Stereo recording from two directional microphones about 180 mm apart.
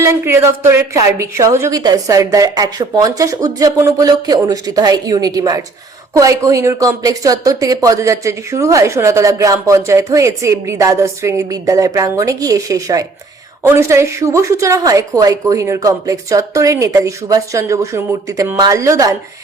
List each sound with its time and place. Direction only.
0.0 s a woman's voice: 15° right (ahead or behind)